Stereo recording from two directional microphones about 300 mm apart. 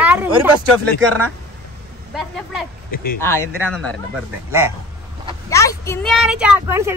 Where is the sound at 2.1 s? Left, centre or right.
Centre.